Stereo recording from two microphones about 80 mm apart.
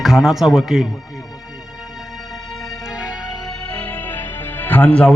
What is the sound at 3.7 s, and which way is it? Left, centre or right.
Music, centre.